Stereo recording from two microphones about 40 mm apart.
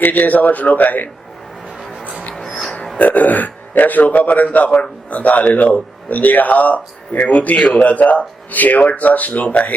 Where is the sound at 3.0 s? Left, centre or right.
Left.